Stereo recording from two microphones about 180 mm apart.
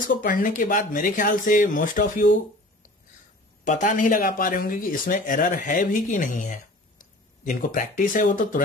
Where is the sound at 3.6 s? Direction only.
45° left (ahead or behind).